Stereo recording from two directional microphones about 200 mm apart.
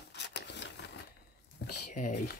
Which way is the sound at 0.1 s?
60° left (ahead or behind).